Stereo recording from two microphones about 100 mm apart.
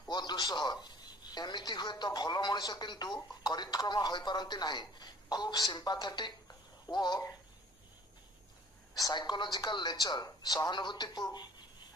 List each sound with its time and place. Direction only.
0.1 s a man's voice: 45° left (ahead or behind)
8.9 s a woman's voice: 40° left (ahead or behind)